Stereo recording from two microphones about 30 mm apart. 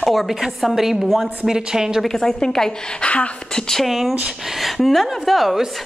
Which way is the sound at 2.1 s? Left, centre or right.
Centre.